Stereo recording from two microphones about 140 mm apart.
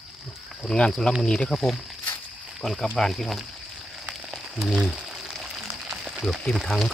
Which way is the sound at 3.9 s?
Centre (ahead or behind).